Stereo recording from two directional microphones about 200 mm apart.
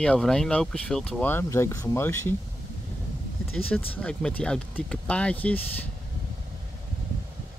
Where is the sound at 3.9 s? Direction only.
5° left (ahead or behind).